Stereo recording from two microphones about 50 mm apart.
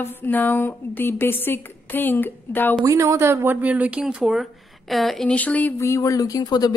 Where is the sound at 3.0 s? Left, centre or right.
Right.